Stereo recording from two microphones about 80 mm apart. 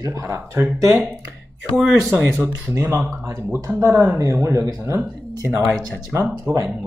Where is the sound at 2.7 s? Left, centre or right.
Right.